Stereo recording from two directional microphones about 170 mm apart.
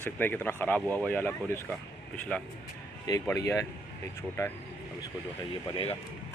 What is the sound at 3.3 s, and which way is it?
Speech, 15° left (ahead or behind).